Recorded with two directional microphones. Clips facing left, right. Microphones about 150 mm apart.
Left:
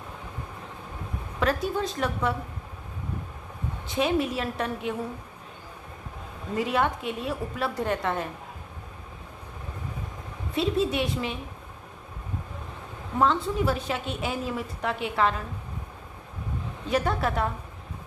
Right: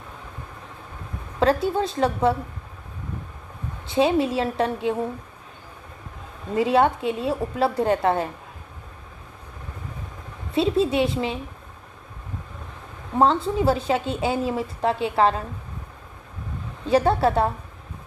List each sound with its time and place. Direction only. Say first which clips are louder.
1.4 s a woman's voice: right 6 dB; 30° right (ahead or behind)
3.8 s a woman's voice: right 5 dB; 30° right (ahead or behind)
6.6 s a woman's voice: right 7 dB; 30° right (ahead or behind)
10.5 s a woman's voice: right 5 dB; 30° right (ahead or behind)
13.1 s a woman's voice: right 4 dB; 30° right (ahead or behind)
16.9 s a woman's voice: right 7 dB; 30° right (ahead or behind)